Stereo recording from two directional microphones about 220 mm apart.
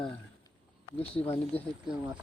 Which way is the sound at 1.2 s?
25° left (ahead or behind).